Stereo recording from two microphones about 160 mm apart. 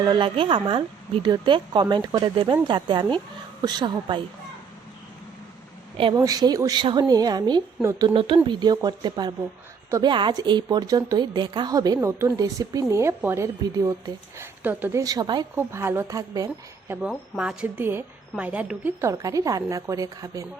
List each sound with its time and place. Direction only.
0.0 s a woman's voice: 30° right (ahead or behind)
6.1 s a woman's voice: 25° right (ahead or behind)
8.0 s a woman's voice: 35° right (ahead or behind)
15.5 s a woman's voice: 15° right (ahead or behind)
17.1 s a woman's voice: 5° right (ahead or behind); by 20.5 s 20° right (ahead or behind)